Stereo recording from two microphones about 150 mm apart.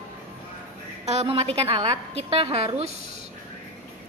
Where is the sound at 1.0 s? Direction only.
40° right (ahead or behind).